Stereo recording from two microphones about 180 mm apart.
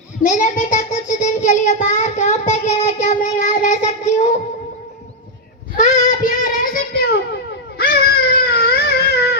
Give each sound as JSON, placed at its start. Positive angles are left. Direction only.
{"t": 0.2, "sound": "child singing", "side_deg": 45}
{"t": 5.7, "sound": "child singing", "side_deg": 40}
{"t": 7.8, "sound": "baby cry", "side_deg": 60}